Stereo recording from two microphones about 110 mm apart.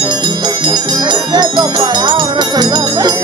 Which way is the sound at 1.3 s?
40° right (ahead or behind).